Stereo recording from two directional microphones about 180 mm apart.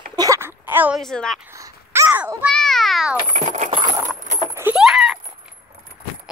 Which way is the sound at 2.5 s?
Centre (ahead or behind).